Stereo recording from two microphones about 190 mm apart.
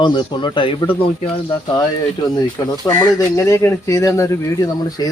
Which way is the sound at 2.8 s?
15° left (ahead or behind).